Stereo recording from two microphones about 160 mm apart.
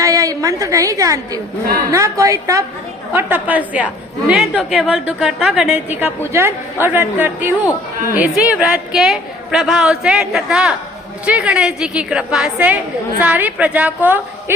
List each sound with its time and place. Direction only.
0.0 s a woman's voice: 20° right (ahead or behind)